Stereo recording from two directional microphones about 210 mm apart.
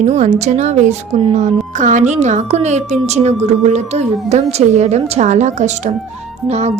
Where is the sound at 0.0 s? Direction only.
30° right (ahead or behind).